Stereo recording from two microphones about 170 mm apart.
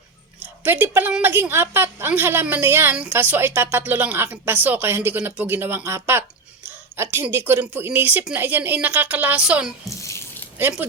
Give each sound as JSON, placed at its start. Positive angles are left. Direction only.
{"t": 0.6, "sound": "a woman's voice", "side_deg": -10}
{"t": 9.9, "sound": "a sound", "side_deg": 15}
{"t": 10.6, "sound": "a woman's voice", "side_deg": -10}